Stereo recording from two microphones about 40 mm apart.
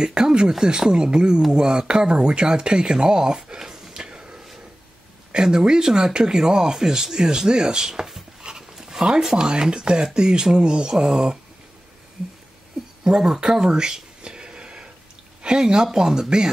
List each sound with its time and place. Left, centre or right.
0.0 s speech: right
8.4 s dog: centre
9.2 s speech: centre
13.0 s speech: centre
13.5 s a sound: centre
15.4 s speech: centre